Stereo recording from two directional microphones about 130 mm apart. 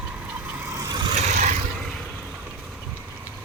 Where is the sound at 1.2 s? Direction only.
65° right (ahead or behind).